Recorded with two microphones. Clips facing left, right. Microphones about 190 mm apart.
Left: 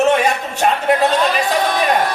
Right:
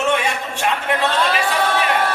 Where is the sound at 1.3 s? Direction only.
40° left (ahead or behind).